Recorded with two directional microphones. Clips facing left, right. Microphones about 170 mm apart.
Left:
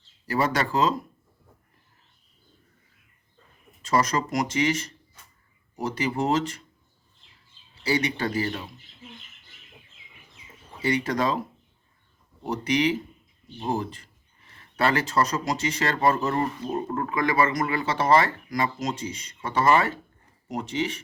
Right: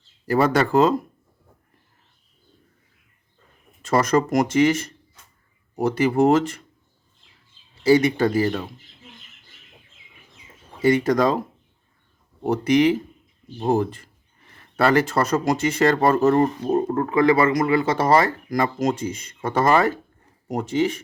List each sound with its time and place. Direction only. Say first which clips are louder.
0.3 s speech: right 6 dB; 50° right (ahead or behind)
3.8 s speech: right 5 dB; 50° right (ahead or behind)
7.9 s speech: right 9 dB; 45° right (ahead or behind)
10.8 s speech: right 7 dB; 45° right (ahead or behind)